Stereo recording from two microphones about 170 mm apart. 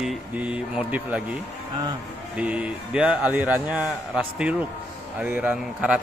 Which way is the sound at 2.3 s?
5° right (ahead or behind).